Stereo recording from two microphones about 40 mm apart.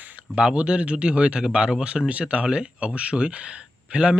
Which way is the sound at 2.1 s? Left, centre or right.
Right.